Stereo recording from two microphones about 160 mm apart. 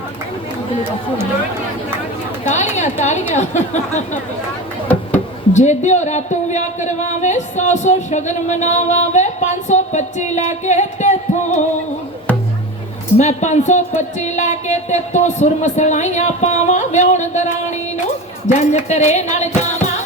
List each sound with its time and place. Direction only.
2.4 s a man's voice: 45° left (ahead or behind)
5.5 s a man's voice: 45° left (ahead or behind)
13.1 s a man's voice: 45° left (ahead or behind)